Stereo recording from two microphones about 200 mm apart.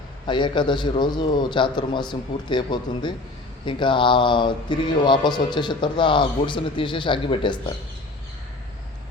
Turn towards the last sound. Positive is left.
turn(degrees=25)  # may be behind; listen again after turning